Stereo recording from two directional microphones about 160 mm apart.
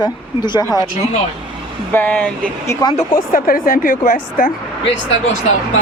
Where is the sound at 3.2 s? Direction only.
60° left (ahead or behind).